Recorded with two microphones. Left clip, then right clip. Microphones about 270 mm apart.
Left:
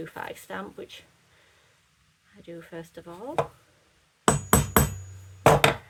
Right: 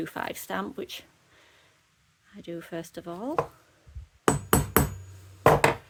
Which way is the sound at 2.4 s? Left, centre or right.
Right.